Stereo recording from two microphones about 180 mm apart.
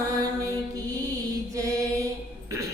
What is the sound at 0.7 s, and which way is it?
Mantra, 20° right (ahead or behind).